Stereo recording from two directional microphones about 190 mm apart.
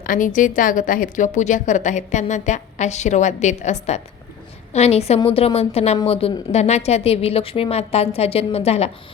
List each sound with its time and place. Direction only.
0.0 s a woman's voice: 45° left (ahead or behind)